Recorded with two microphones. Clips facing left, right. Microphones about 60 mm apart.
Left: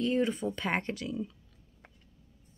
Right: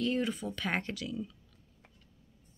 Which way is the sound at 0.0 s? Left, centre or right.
Left.